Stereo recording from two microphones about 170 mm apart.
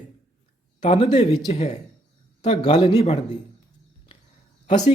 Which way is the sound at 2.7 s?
35° left (ahead or behind).